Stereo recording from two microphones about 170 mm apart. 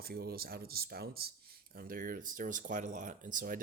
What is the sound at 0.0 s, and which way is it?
Speech, 65° right (ahead or behind).